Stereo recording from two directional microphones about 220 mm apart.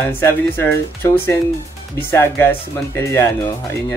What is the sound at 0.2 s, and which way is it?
Speech, 10° left (ahead or behind).